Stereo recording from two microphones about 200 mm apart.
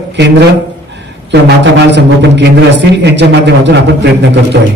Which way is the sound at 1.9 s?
60° right (ahead or behind).